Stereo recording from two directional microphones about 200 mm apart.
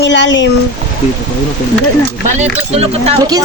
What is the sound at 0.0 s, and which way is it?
Speech, 65° left (ahead or behind).